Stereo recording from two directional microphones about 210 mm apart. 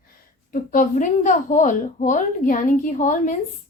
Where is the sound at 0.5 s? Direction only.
40° left (ahead or behind).